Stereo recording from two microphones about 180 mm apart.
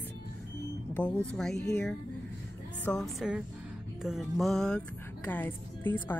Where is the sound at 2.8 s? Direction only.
Centre (ahead or behind).